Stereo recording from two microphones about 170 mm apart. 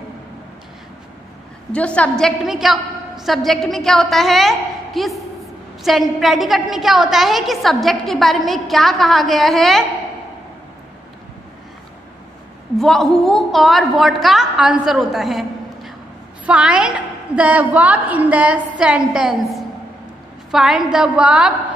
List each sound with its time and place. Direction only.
1.7 s a woman's voice: 5° left (ahead or behind)
12.7 s a woman's voice: centre (ahead or behind)